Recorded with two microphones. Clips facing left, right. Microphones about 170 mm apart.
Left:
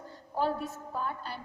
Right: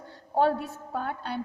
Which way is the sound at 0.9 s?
70° right (ahead or behind).